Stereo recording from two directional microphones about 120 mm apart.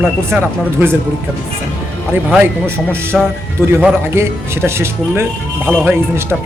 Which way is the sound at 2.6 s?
20° right (ahead or behind).